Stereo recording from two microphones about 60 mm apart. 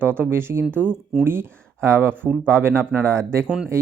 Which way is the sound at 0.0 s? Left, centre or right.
Right.